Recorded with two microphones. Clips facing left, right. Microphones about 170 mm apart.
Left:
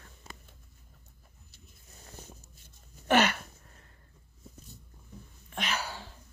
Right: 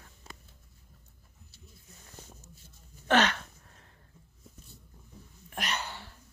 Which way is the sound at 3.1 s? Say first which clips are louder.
Left 1 dB; 10° left (ahead or behind).